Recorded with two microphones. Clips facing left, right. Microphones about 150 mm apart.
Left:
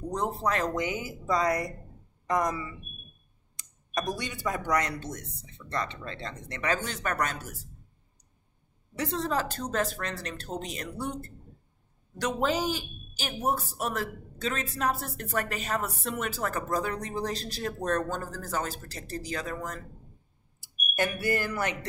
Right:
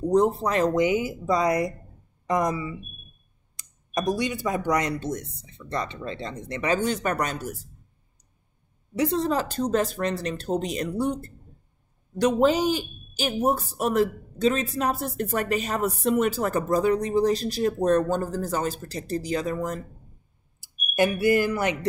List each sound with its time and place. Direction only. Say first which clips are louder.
0.1 s speech: right 8 dB; 15° right (ahead or behind)
3.5 s a sound: right 4 dB; 15° right (ahead or behind)
4.2 s speech: right 6 dB; 15° right (ahead or behind)
8.9 s speech: right 6 dB; 15° right (ahead or behind)
12.2 s speech: right 8 dB; 20° right (ahead or behind)